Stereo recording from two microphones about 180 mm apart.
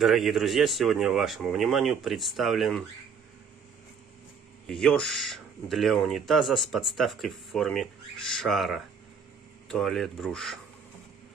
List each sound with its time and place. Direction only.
0.0 s speech: centre (ahead or behind)
4.6 s speech: 5° left (ahead or behind)